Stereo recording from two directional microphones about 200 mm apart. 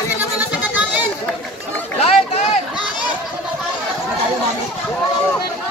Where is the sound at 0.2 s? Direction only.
10° right (ahead or behind).